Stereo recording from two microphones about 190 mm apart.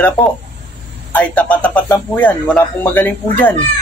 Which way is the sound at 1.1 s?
10° left (ahead or behind).